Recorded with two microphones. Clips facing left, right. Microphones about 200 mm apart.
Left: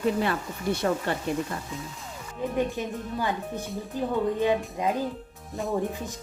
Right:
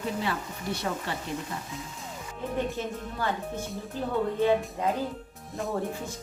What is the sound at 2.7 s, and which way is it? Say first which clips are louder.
Speech: left 2 dB; 15° left (ahead or behind).